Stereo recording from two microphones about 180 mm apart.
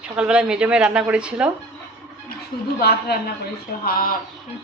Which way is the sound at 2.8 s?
60° left (ahead or behind).